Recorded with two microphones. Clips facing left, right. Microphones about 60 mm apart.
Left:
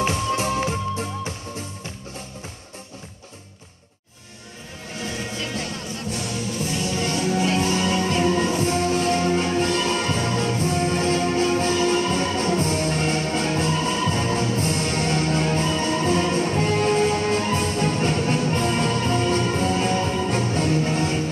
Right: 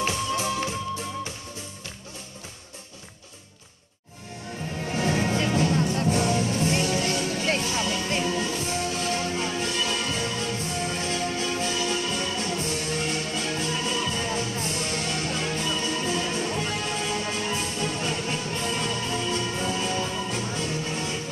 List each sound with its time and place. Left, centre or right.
0.1 s music: left
4.9 s music: right
5.4 s music: right
7.5 s music: left